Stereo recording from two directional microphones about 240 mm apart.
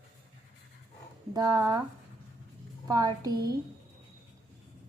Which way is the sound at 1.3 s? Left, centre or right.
Centre.